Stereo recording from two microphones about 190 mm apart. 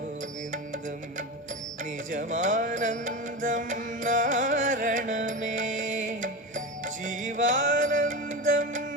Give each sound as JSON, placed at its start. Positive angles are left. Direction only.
{"t": 1.8, "sound": "music", "side_deg": -45}